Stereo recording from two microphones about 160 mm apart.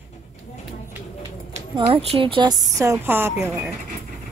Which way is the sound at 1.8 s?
35° right (ahead or behind).